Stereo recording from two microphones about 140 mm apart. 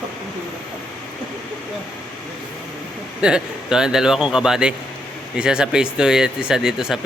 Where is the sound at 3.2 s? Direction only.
5° right (ahead or behind).